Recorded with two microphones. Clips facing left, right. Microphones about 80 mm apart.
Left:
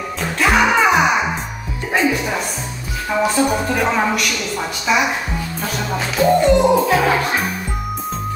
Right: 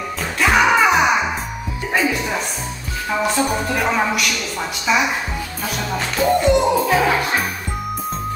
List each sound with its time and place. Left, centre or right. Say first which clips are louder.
0.2 s music: even; centre
3.1 s a woman's voice: left 3 dB; centre